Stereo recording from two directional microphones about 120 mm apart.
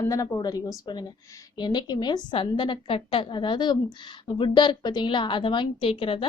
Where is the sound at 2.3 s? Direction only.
45° left (ahead or behind).